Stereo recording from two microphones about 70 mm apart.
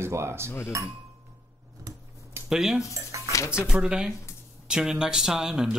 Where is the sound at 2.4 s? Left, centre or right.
Centre.